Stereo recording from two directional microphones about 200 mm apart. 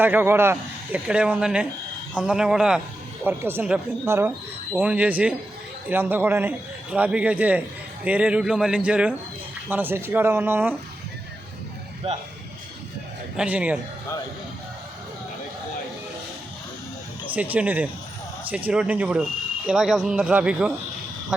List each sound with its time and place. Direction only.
0.0 s a man's voice: 10° right (ahead or behind)
12.0 s speech: 30° right (ahead or behind)
13.3 s speech: 5° right (ahead or behind)
17.3 s a man's voice: 10° right (ahead or behind)